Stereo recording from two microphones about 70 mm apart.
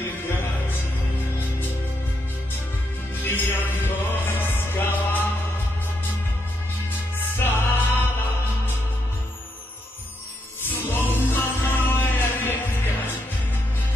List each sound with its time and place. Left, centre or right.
3.3 s music: left
7.2 s music: left
10.7 s music: left